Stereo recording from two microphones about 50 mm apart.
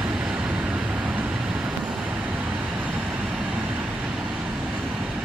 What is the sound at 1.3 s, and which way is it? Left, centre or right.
Vehicle, centre.